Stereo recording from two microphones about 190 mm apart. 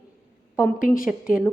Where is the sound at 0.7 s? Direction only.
45° left (ahead or behind).